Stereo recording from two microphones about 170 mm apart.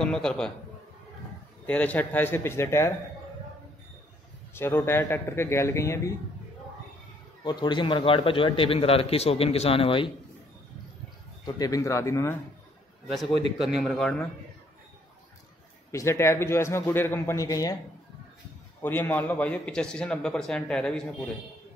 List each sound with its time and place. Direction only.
0.0 s a man's voice: 5° left (ahead or behind)
1.7 s a man's voice: 10° left (ahead or behind)
4.6 s a man's voice: 15° left (ahead or behind)
7.4 s a man's voice: 25° left (ahead or behind)
11.4 s a man's voice: 20° left (ahead or behind)
13.0 s a man's voice: centre (ahead or behind)
15.9 s a man's voice: 15° left (ahead or behind)
18.8 s a man's voice: 10° left (ahead or behind)